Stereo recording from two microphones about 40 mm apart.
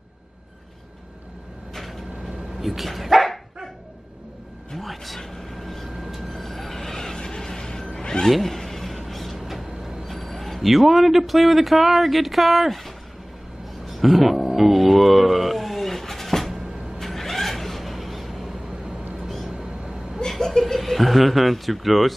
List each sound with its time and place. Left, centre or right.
1.7 s dog: centre
4.7 s a sound: centre
5.9 s vehicle: centre
8.3 s vehicle: centre
10.0 s a man's voice: centre
13.8 s a sound: centre
18.7 s vehicle: centre
20.2 s chuckle: centre